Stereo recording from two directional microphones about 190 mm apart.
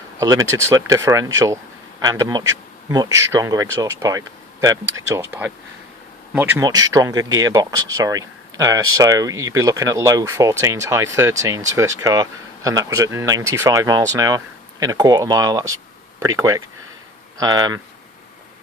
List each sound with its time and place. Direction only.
0.2 s speech: 15° right (ahead or behind)